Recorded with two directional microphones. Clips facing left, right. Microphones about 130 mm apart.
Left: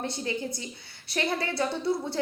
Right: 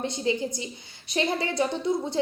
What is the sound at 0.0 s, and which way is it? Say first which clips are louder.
A woman's voice: right 4 dB; 20° right (ahead or behind).